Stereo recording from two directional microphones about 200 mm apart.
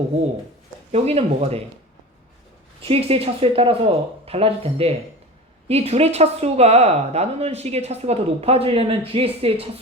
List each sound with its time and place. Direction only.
0.9 s speech: 30° right (ahead or behind)
2.8 s speech: 30° right (ahead or behind)